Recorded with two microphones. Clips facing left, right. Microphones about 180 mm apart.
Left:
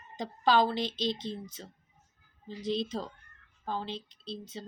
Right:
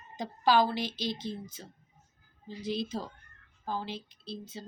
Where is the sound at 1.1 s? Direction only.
20° left (ahead or behind).